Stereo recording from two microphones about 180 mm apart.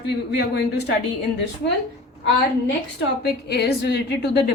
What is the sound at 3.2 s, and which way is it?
A woman's voice, 65° left (ahead or behind).